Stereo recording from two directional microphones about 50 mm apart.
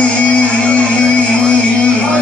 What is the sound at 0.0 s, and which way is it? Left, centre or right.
Music, left.